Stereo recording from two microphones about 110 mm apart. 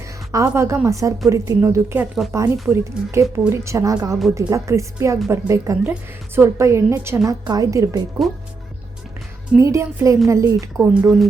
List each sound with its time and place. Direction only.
0.3 s speech: 25° right (ahead or behind)
7.3 s a woman's voice: 35° right (ahead or behind)
9.6 s speech: 30° right (ahead or behind)